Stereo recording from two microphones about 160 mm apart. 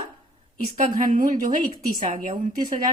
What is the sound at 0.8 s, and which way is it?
Speech, 55° right (ahead or behind).